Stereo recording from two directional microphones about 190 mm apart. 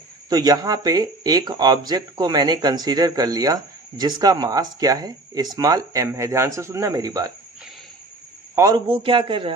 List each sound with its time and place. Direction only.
0.3 s speech: 20° right (ahead or behind)
8.5 s speech: 20° right (ahead or behind)